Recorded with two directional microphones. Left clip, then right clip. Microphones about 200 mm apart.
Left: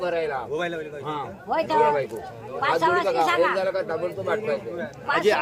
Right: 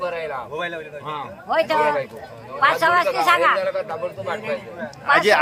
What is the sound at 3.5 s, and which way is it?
A man's voice, 50° left (ahead or behind).